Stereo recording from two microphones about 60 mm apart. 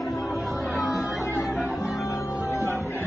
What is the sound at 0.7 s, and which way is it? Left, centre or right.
Music, centre.